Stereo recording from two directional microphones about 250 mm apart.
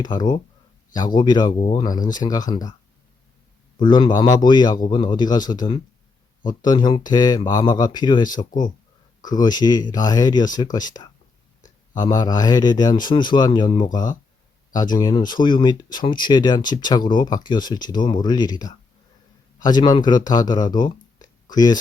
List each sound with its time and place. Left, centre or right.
0.0 s speech: centre
3.8 s speech: centre